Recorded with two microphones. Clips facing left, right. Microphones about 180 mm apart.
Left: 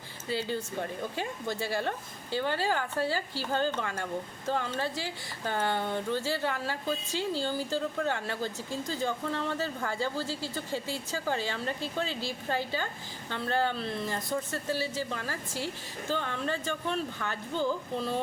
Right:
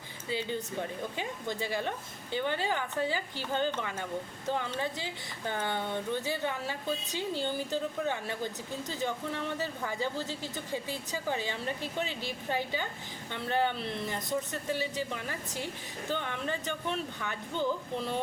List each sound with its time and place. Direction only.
0.3 s speech: 20° right (ahead or behind)